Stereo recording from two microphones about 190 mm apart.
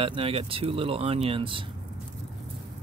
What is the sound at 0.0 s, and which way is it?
Speech, 30° right (ahead or behind).